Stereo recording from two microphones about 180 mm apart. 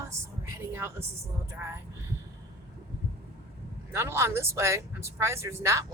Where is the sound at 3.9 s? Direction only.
15° right (ahead or behind).